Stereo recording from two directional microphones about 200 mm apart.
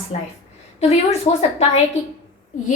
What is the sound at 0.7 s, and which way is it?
Speech, 35° left (ahead or behind).